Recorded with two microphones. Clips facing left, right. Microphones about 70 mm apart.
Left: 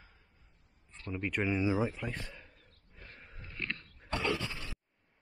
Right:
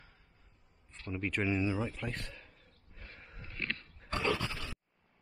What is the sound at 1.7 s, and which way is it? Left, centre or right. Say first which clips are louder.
Speech: left 4 dB; centre.